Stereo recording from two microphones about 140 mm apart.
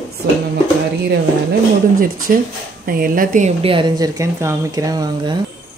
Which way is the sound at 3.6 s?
35° right (ahead or behind).